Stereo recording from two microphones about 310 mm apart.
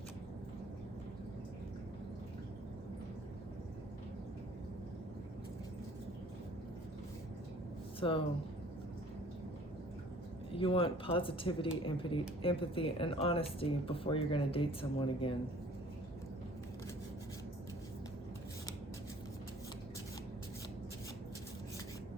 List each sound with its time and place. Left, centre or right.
7.9 s speech: centre
10.5 s speech: centre